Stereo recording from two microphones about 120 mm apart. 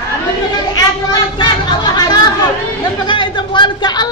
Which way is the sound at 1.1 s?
35° left (ahead or behind).